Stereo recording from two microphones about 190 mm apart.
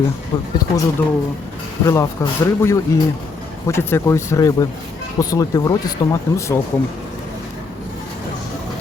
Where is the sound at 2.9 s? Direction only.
15° left (ahead or behind).